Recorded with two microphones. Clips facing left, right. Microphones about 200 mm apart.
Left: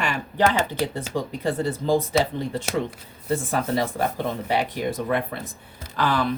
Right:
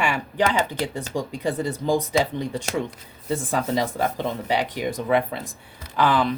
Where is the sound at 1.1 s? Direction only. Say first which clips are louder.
Right 1 dB; 15° right (ahead or behind).